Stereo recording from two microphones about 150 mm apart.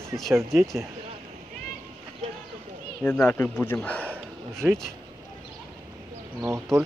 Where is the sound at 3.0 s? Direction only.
10° left (ahead or behind).